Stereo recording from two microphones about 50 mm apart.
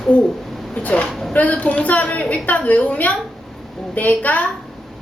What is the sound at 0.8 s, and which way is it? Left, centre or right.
A woman's voice, left.